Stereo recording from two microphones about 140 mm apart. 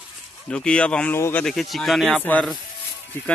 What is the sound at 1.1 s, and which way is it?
Speech, 20° left (ahead or behind).